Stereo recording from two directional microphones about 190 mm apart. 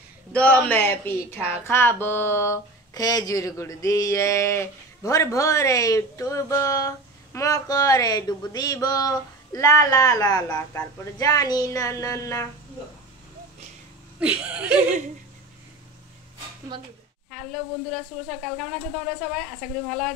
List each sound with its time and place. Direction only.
0.3 s a sound: 5° left (ahead or behind)
14.2 s speech: 5° right (ahead or behind)
17.3 s speech: centre (ahead or behind)